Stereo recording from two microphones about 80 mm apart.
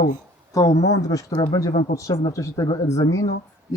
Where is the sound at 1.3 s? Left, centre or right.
Left.